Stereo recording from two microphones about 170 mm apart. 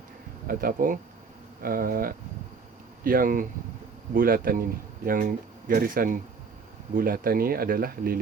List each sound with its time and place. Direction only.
0.4 s speech: 55° right (ahead or behind)